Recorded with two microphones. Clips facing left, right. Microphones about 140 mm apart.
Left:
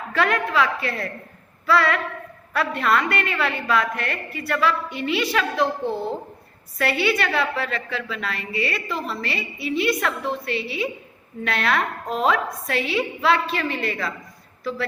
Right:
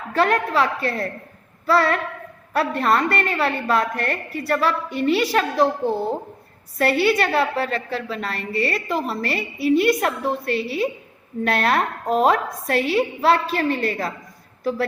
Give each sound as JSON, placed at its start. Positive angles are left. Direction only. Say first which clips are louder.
{"t": 0.1, "sound": "a woman's voice", "louder": "right 3 dB", "side_deg": -35}